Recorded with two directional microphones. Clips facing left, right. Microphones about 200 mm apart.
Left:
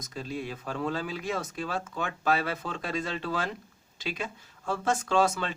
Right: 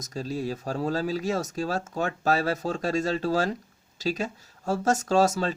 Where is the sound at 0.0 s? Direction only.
40° right (ahead or behind).